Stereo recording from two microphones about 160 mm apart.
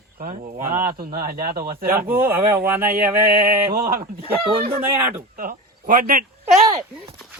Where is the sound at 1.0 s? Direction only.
65° right (ahead or behind).